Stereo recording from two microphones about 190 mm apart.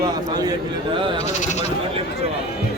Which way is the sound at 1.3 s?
35° left (ahead or behind).